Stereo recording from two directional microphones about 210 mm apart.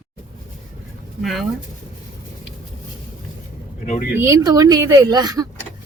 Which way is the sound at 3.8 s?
35° left (ahead or behind).